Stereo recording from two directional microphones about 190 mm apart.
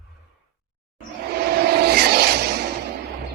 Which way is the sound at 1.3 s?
55° right (ahead or behind).